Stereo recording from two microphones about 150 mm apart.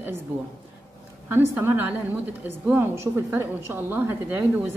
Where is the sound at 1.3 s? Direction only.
15° right (ahead or behind).